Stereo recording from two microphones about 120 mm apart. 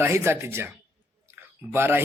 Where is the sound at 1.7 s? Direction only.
20° right (ahead or behind).